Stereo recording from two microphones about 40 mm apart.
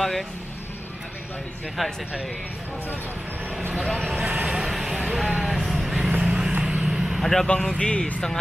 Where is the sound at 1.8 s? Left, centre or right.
Centre.